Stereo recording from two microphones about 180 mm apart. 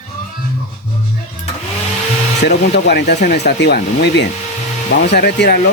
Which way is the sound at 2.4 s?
65° left (ahead or behind).